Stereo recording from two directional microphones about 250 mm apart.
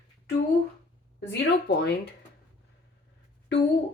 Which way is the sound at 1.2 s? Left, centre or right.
Left.